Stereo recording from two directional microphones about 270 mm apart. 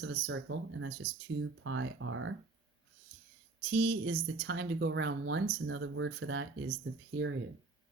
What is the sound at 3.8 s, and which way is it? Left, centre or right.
Speech, right.